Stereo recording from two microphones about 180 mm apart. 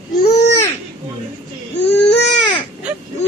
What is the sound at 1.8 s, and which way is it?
Baby cry, 70° left (ahead or behind).